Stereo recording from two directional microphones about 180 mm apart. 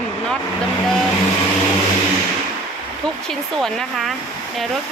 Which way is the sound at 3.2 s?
Centre (ahead or behind).